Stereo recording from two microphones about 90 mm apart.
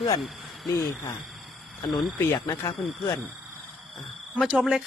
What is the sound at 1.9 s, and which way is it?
Speech, centre (ahead or behind).